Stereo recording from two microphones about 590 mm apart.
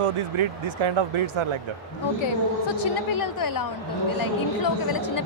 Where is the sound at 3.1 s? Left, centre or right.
Left.